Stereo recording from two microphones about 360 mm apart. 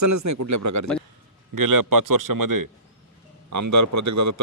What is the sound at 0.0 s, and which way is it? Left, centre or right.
A man's voice, right.